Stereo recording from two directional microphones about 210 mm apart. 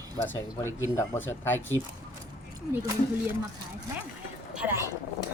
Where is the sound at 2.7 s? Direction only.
15° right (ahead or behind).